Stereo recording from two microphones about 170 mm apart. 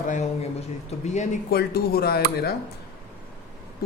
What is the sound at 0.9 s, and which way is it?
Speech, 45° left (ahead or behind).